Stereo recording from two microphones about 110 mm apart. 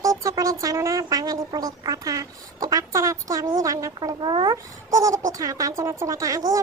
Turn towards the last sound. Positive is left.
turn(degrees=-30)  # may be behind; listen again after turning